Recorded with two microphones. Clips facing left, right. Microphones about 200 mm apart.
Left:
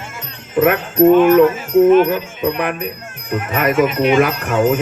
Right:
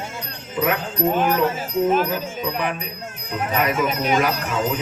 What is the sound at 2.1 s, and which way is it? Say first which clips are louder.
Music: left 6 dB; 55° left (ahead or behind).